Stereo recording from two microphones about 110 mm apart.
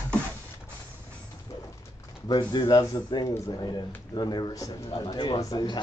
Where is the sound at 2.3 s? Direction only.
40° left (ahead or behind).